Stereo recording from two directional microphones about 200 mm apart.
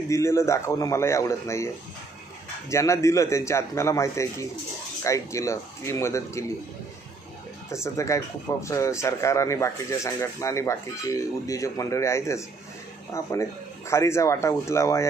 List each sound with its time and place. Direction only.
0.1 s speech: 15° left (ahead or behind)
2.7 s speech: 15° left (ahead or behind)
7.7 s speech: 15° left (ahead or behind)